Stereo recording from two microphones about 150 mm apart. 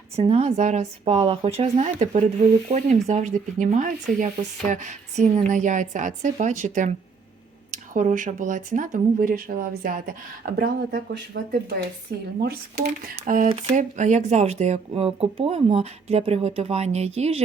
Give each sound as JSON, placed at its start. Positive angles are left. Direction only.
{"t": 0.2, "sound": "speech", "side_deg": -45}
{"t": 4.7, "sound": "a sound", "side_deg": -50}
{"t": 5.5, "sound": "speech", "side_deg": -55}
{"t": 10.4, "sound": "speech", "side_deg": -90}
{"t": 13.2, "sound": "speech", "side_deg": -60}